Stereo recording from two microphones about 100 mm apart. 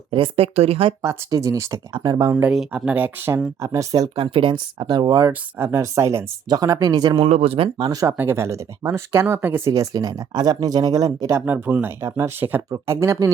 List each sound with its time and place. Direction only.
0.1 s speech: 70° right (ahead or behind)
1.0 s speech: 35° right (ahead or behind)
1.9 s speech: 45° right (ahead or behind)
2.5 s speech: 10° right (ahead or behind)
3.6 s speech: 35° right (ahead or behind)
5.3 s speech: 25° right (ahead or behind)
6.5 s speech: 40° right (ahead or behind)
7.2 s speech: 90° right
7.8 s speech: 40° right (ahead or behind)
8.1 s speech: 20° right (ahead or behind)
9.7 s speech: 35° right (ahead or behind)
11.3 s speech: 20° right (ahead or behind)